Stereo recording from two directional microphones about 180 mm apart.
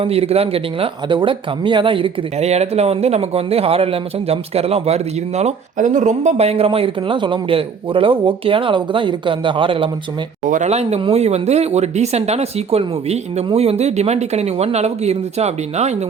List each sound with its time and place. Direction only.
0.0 s speech: 35° right (ahead or behind)
10.5 s speech: 40° right (ahead or behind)